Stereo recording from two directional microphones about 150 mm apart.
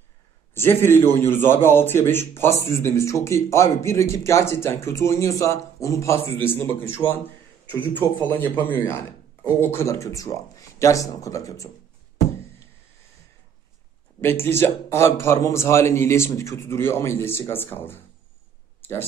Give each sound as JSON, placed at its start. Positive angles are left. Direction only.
{"t": 0.6, "sound": "a man's voice", "side_deg": 15}
{"t": 14.2, "sound": "a man's voice", "side_deg": 15}
{"t": 18.8, "sound": "a sound", "side_deg": 15}